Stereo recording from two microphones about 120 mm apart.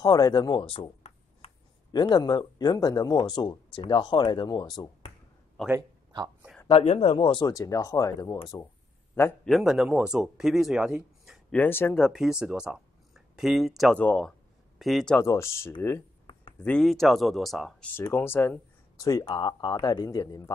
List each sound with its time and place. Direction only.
0.0 s speech: 30° left (ahead or behind)
5.8 s speech: 35° right (ahead or behind)
6.7 s speech: 65° left (ahead or behind)
7.2 s speech: 40° left (ahead or behind)
9.4 s speech: centre (ahead or behind)
11.5 s speech: 15° left (ahead or behind)
12.0 s speech: 5° right (ahead or behind)
13.9 s speech: 10° left (ahead or behind)
14.8 s speech: centre (ahead or behind)
15.1 s speech: 25° left (ahead or behind)
16.8 s speech: centre (ahead or behind)
18.1 s speech: 20° left (ahead or behind)
18.9 s speech: 30° left (ahead or behind)